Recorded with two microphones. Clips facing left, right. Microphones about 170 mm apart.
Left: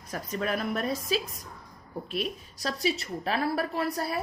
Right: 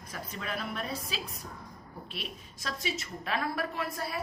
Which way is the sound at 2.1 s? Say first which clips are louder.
Left 11 dB; 40° left (ahead or behind).